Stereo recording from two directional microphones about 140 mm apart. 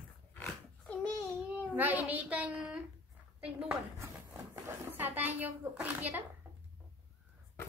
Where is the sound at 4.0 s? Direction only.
15° right (ahead or behind).